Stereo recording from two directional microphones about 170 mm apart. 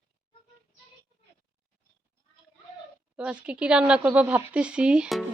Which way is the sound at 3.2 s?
5° right (ahead or behind).